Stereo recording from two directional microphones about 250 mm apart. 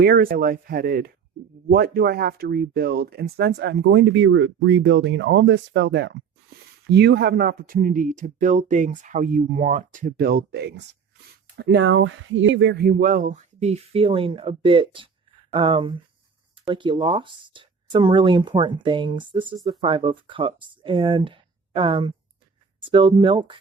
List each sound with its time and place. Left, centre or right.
0.0 s speech: right; by 23.6 s centre